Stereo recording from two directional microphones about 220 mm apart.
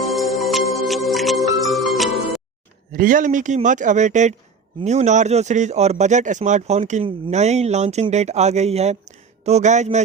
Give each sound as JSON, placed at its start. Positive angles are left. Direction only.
{"t": 0.0, "sound": "music", "side_deg": 0}
{"t": 2.9, "sound": "speech", "side_deg": -40}